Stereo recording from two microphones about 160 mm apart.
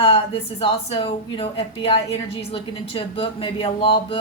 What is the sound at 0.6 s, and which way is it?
Speech, 35° left (ahead or behind).